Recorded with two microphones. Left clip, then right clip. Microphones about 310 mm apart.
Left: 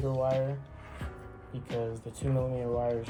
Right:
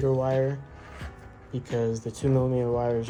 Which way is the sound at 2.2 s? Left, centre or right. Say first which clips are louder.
Right 7 dB; right.